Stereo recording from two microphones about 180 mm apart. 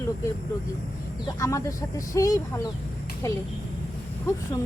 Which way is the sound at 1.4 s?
15° left (ahead or behind).